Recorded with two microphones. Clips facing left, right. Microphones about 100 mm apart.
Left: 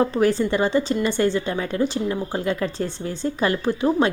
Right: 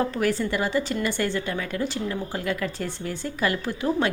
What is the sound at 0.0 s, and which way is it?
A woman's voice, 25° left (ahead or behind).